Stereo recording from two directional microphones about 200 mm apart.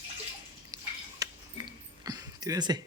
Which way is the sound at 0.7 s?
20° right (ahead or behind).